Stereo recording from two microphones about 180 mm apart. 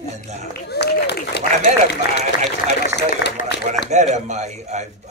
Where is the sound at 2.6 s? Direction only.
70° left (ahead or behind).